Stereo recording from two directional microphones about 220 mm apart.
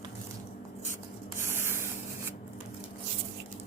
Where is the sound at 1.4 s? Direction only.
10° right (ahead or behind).